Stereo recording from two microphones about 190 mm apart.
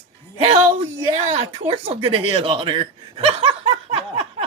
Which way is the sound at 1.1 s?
35° right (ahead or behind).